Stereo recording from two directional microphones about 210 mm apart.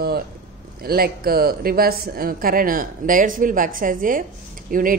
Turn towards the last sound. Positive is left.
turn(degrees=-40)  # may be behind; listen again after turning